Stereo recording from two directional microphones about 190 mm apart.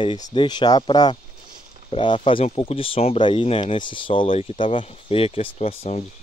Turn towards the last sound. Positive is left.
turn(degrees=30)  # may be behind; listen again after turning